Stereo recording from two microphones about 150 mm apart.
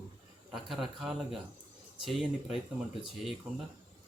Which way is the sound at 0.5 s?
Centre (ahead or behind).